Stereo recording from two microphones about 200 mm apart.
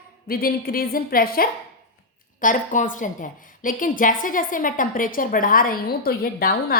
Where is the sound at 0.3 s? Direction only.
45° left (ahead or behind).